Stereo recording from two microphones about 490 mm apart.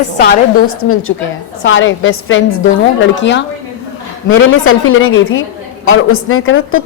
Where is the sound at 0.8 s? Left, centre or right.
Left.